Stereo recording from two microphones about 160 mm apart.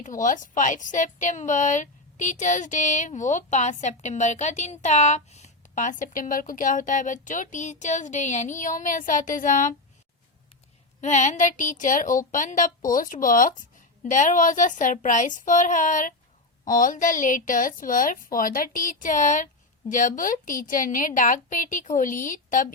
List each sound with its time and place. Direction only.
0.0 s a woman's voice: 55° left (ahead or behind)
11.0 s a woman's voice: 45° left (ahead or behind)